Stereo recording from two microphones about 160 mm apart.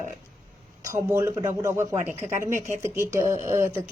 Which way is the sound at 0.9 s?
15° right (ahead or behind).